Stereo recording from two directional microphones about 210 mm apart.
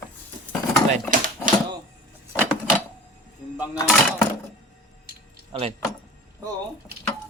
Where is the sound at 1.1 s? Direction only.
40° right (ahead or behind).